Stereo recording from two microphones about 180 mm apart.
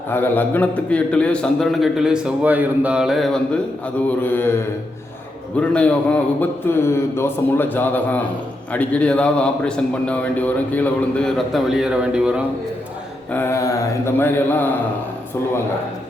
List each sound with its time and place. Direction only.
0.1 s a man's voice: 10° left (ahead or behind)
5.5 s a man's voice: 5° left (ahead or behind)
13.3 s a man's voice: 15° left (ahead or behind)